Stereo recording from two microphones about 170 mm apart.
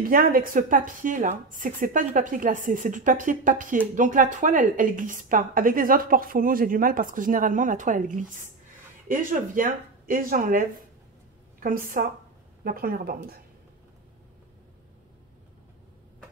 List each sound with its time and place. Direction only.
0.0 s a woman's voice: 55° right (ahead or behind)